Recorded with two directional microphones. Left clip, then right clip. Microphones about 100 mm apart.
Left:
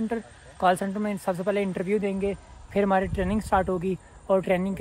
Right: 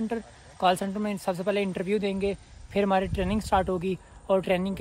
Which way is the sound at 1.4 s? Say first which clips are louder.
Even; 20° right (ahead or behind).